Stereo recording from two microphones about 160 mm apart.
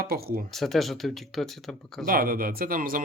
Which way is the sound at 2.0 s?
65° right (ahead or behind).